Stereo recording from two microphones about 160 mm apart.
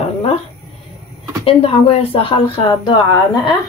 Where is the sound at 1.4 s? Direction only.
35° left (ahead or behind).